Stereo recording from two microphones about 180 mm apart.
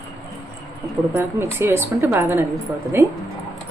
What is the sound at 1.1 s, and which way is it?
A woman's voice, 15° right (ahead or behind).